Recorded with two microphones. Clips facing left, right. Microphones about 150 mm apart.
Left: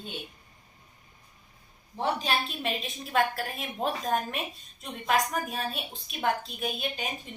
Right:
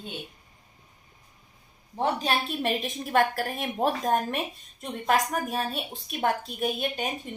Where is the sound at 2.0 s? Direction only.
50° right (ahead or behind).